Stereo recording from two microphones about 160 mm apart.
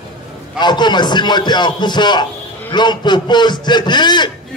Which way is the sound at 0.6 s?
30° left (ahead or behind).